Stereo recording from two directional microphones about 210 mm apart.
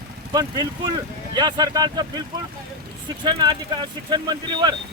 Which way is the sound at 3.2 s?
20° right (ahead or behind).